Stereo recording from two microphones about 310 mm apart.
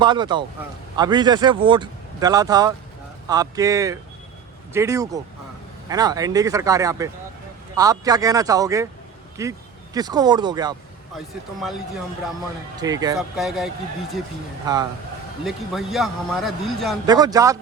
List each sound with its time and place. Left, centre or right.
0.0 s speech: centre
12.8 s speech: centre
13.1 s a man's voice: centre
14.7 s speech: centre
15.4 s a man's voice: centre
17.1 s speech: centre